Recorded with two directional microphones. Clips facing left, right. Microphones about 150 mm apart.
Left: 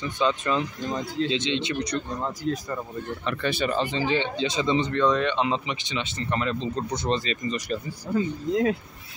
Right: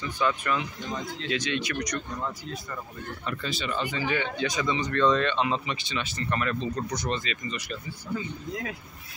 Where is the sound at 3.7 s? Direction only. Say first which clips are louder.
Left 4 dB; 30° left (ahead or behind).